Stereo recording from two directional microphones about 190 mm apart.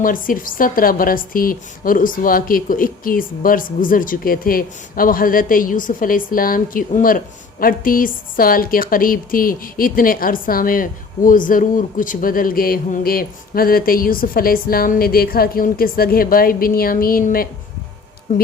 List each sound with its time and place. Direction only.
0.0 s a woman's voice: 45° left (ahead or behind)